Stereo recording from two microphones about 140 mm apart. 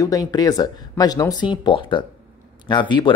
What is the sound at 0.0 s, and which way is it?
Speech, 25° left (ahead or behind).